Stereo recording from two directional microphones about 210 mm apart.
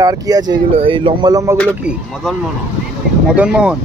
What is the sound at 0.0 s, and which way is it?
Speech, 15° right (ahead or behind).